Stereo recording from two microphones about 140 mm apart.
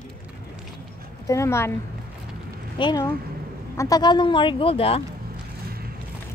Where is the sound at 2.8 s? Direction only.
30° left (ahead or behind).